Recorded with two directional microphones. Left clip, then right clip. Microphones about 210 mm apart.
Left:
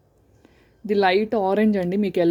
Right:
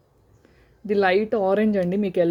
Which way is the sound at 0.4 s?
15° left (ahead or behind).